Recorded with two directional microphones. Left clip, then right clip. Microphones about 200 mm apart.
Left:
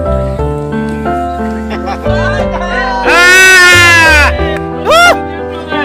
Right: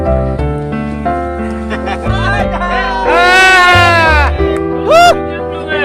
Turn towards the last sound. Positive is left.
turn(degrees=5)  # may be behind; listen again after turning